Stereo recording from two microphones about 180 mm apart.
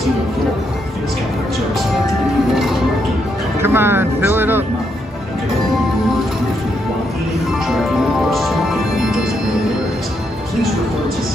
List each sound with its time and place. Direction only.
3.6 s speech: 10° right (ahead or behind)
8.3 s music: centre (ahead or behind)